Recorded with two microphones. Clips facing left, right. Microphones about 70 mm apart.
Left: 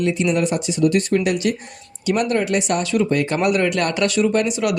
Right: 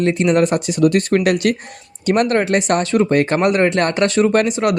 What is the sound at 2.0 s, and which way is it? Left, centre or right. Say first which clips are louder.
Speech: right 4 dB; right.